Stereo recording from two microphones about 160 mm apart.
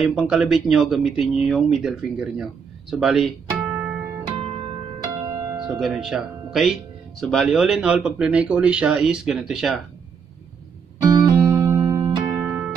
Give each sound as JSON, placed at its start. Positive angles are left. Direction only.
{"t": 0.0, "sound": "speech", "side_deg": -5}
{"t": 5.0, "sound": "music", "side_deg": -20}
{"t": 5.6, "sound": "speech", "side_deg": -5}
{"t": 11.0, "sound": "music", "side_deg": -25}
{"t": 12.4, "sound": "music", "side_deg": -10}